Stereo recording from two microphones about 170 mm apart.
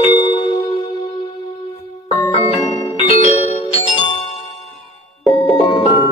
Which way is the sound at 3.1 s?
40° left (ahead or behind).